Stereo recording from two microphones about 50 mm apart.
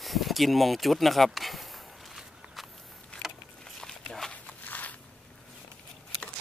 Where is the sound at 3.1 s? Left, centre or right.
Left.